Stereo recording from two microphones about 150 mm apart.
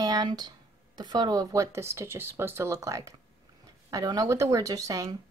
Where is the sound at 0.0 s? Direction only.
25° right (ahead or behind).